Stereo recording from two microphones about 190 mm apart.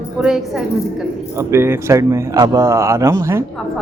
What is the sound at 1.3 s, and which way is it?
A man's voice, 10° right (ahead or behind).